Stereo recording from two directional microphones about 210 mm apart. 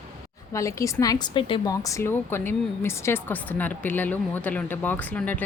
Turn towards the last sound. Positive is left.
turn(degrees=10)  # may be behind; listen again after turning